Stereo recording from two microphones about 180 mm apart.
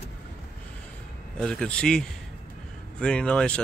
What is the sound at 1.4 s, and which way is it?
A man's voice, 5° left (ahead or behind).